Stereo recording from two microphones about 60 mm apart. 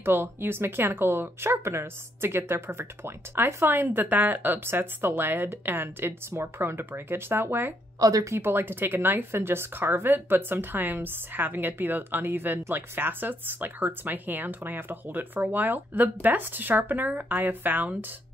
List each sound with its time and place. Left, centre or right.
0.0 s speech: right
8.0 s speech: right
8.4 s speech: right